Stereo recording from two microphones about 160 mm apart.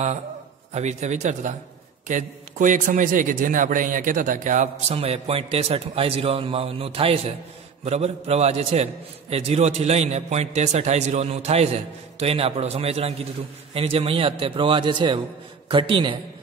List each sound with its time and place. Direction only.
0.7 s a man's voice: 45° right (ahead or behind)